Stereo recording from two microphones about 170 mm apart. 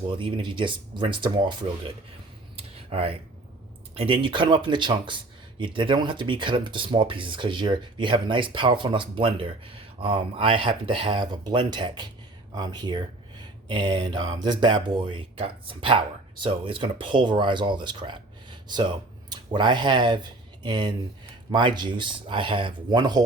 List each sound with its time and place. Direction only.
0.2 s speech: 30° right (ahead or behind)
2.6 s a sound: 35° right (ahead or behind)
3.9 s speech: 35° right (ahead or behind)